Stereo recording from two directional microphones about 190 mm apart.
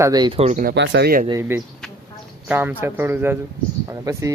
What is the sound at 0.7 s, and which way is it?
Speech, 65° right (ahead or behind).